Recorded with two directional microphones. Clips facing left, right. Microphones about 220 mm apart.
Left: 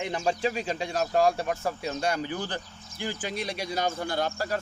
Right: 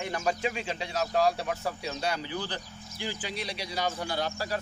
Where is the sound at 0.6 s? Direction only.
45° left (ahead or behind).